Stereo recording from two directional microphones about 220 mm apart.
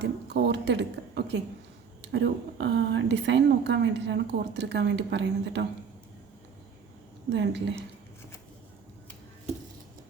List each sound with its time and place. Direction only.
0.0 s a woman's voice: 50° right (ahead or behind)
7.3 s a woman's voice: 55° right (ahead or behind)
7.8 s a sound: 10° left (ahead or behind)